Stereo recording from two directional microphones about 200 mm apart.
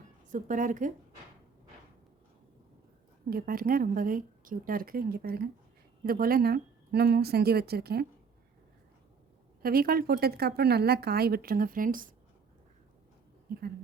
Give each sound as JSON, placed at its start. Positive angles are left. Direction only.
{"t": 0.3, "sound": "a woman's voice", "side_deg": -40}
{"t": 3.2, "sound": "speech", "side_deg": -45}
{"t": 9.6, "sound": "speech", "side_deg": -50}